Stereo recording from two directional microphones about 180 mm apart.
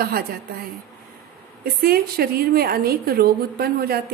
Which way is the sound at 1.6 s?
60° right (ahead or behind).